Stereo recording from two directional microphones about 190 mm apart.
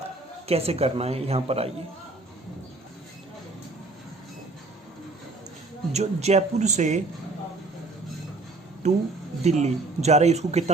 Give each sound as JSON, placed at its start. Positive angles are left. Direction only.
{"t": 0.4, "sound": "speech", "side_deg": -30}
{"t": 5.9, "sound": "speech", "side_deg": -35}
{"t": 8.8, "sound": "speech", "side_deg": -35}